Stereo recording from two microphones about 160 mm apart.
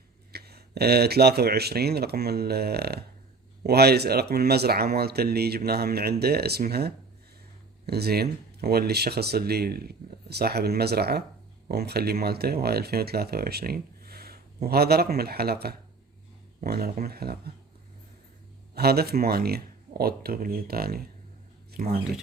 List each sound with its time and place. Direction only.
0.3 s speech: 85° right
18.7 s speech: 80° right